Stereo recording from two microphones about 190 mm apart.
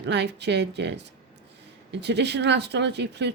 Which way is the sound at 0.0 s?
65° right (ahead or behind).